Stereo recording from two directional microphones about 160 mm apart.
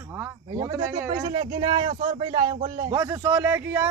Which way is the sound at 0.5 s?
25° right (ahead or behind).